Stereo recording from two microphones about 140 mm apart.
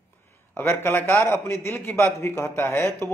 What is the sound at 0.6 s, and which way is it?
A man's voice, 15° left (ahead or behind).